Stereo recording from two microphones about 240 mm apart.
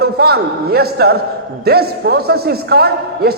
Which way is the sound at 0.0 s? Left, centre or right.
Right.